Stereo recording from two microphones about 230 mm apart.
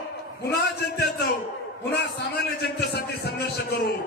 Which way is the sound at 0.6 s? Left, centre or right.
Left.